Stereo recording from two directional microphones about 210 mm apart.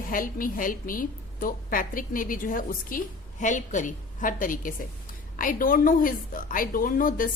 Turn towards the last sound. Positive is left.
turn(degrees=40)  # may be behind; listen again after turning